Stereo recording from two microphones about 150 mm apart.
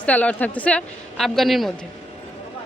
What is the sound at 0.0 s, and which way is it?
A woman's voice, 10° left (ahead or behind).